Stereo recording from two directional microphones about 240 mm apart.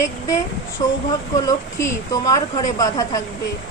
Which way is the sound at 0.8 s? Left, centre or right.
Centre.